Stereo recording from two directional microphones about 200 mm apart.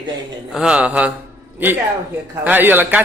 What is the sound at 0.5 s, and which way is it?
Speech, 5° right (ahead or behind).